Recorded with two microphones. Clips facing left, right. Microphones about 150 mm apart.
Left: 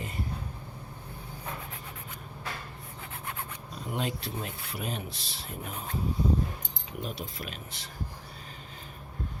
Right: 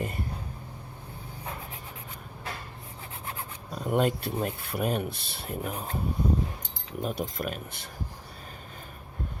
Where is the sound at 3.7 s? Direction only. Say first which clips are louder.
Right 8 dB; 50° right (ahead or behind).